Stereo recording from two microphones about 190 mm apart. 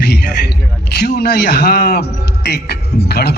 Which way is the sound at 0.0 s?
60° left (ahead or behind).